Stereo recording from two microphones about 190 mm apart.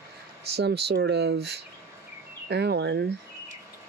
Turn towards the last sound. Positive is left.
turn(degrees=-65)  # may be behind; listen again after turning